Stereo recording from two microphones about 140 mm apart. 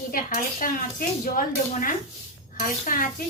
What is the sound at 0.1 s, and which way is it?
A child's voice, 80° left.